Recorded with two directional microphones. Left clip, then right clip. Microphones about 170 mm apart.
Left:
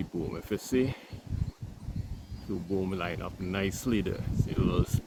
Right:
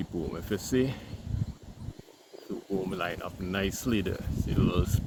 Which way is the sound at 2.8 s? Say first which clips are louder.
Right 1 dB; centre (ahead or behind).